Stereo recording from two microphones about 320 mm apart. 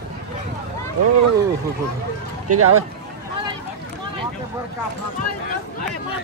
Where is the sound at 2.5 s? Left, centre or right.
Right.